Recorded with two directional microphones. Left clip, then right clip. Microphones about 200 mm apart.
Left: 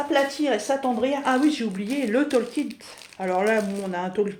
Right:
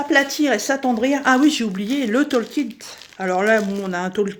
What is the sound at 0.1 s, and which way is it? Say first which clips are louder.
Speech: right 6 dB; 55° right (ahead or behind).